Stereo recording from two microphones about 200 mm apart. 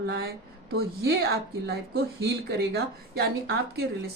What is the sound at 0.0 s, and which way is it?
A woman's voice, 55° right (ahead or behind).